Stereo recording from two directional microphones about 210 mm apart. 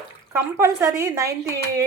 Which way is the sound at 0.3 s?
10° right (ahead or behind).